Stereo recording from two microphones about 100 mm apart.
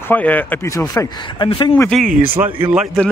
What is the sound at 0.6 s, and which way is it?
Speech, 30° left (ahead or behind).